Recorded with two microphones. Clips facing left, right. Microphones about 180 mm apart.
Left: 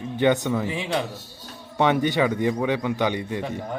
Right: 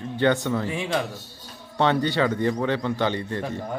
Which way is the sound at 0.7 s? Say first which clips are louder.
Even; centre (ahead or behind).